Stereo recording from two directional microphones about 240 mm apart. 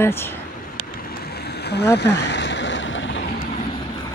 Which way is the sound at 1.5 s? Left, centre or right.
Left.